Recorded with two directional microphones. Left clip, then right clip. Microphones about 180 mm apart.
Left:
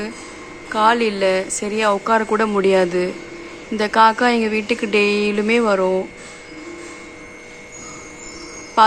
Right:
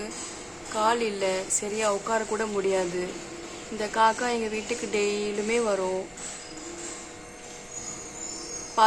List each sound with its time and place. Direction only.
0.7 s speech: 20° left (ahead or behind)
8.8 s speech: 20° left (ahead or behind)